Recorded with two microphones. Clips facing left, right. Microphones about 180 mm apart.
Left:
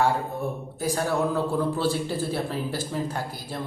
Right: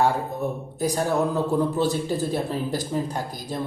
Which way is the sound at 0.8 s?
15° right (ahead or behind).